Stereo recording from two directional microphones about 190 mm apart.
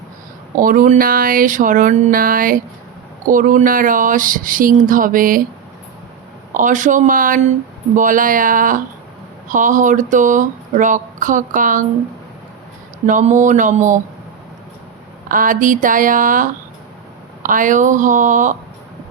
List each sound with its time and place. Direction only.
0.5 s speech: 45° right (ahead or behind)
6.5 s speech: 45° right (ahead or behind)
13.1 s speech: 40° right (ahead or behind)
15.3 s speech: 45° right (ahead or behind)